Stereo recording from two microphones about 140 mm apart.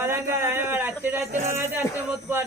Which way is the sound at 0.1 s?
15° right (ahead or behind).